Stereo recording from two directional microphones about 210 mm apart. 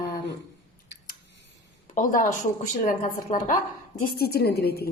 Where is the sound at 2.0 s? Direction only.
35° left (ahead or behind).